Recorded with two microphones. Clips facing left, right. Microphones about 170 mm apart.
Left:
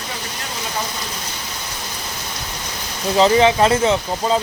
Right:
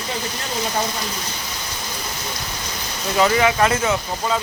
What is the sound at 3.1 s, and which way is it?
Speech, 25° left (ahead or behind).